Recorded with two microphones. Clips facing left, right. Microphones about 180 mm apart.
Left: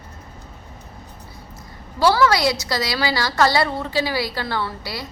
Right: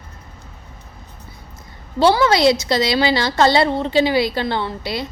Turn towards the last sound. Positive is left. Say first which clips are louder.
# right 4 dB
turn(degrees=-20)  # may be behind; listen again after turning